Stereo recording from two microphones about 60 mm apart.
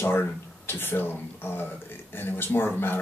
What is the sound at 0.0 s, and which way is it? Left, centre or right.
Speech, left.